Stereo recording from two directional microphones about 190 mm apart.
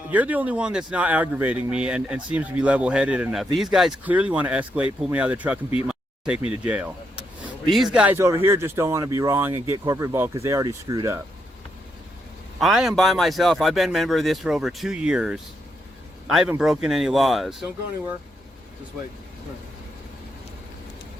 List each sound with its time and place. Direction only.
0.1 s speech: 10° right (ahead or behind)
12.5 s a man's voice: centre (ahead or behind)